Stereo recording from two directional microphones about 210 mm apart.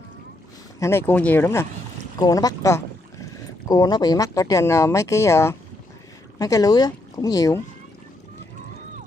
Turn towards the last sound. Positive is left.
turn(degrees=15)  # may be behind; listen again after turning